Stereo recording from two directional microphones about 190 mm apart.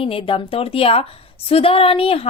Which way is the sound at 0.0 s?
30° left (ahead or behind).